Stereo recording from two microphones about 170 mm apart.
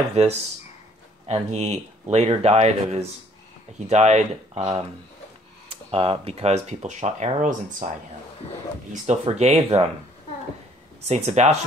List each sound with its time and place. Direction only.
0.2 s speech: 40° right (ahead or behind)
11.1 s speech: 40° right (ahead or behind)